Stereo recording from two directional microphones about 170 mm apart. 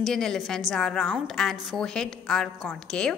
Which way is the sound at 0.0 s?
5° left (ahead or behind).